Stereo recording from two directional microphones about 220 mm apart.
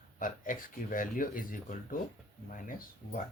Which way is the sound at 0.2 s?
35° left (ahead or behind).